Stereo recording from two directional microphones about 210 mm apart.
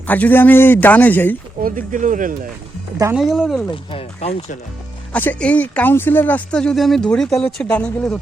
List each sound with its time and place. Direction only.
0.1 s speech: 10° left (ahead or behind)
1.6 s speech: 40° right (ahead or behind)
3.2 s speech: centre (ahead or behind)
3.7 s speech: 30° left (ahead or behind)
5.1 s speech: 5° left (ahead or behind)